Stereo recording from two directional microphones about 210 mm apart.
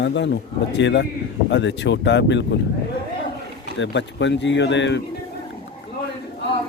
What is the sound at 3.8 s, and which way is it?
Speech, 60° left (ahead or behind).